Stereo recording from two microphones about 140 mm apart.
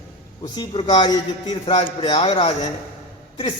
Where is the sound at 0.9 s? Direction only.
30° left (ahead or behind).